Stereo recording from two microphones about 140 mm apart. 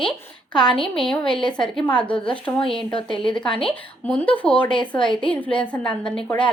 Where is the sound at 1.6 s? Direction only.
5° left (ahead or behind).